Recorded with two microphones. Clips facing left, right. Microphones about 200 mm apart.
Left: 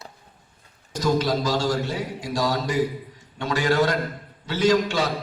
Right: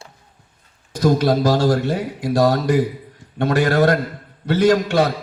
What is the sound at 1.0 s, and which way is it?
Speech, 60° right (ahead or behind).